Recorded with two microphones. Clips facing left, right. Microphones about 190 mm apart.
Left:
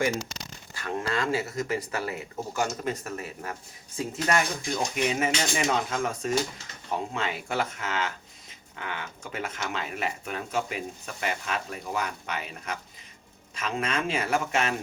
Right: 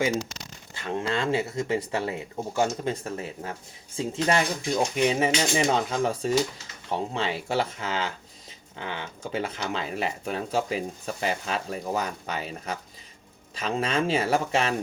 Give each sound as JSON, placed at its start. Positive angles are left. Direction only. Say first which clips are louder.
{"t": 0.7, "sound": "speech", "louder": "right 2 dB", "side_deg": -25}